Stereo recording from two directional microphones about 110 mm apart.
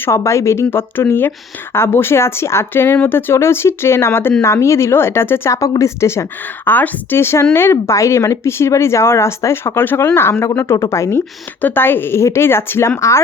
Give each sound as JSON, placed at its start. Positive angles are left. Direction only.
{"t": 0.2, "sound": "speech", "side_deg": 25}